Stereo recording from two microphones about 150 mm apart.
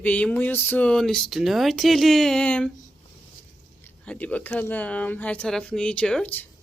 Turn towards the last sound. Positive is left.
turn(degrees=10)  # may be behind; listen again after turning